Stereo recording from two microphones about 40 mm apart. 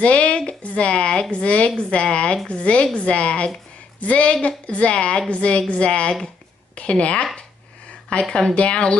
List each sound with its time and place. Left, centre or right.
0.0 s a woman's voice: left